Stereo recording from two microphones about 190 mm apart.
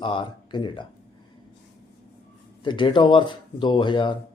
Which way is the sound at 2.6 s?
25° left (ahead or behind).